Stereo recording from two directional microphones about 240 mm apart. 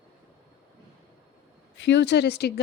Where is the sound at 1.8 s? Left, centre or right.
Left.